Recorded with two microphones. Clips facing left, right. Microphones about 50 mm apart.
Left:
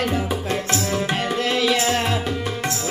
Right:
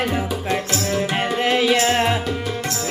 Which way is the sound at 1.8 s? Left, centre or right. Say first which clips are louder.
Right 3 dB; right.